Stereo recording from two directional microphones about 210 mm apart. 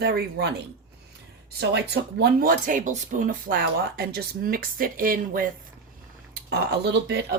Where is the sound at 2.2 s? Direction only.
45° right (ahead or behind).